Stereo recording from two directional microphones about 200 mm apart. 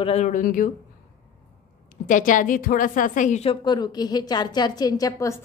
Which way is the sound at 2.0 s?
40° left (ahead or behind).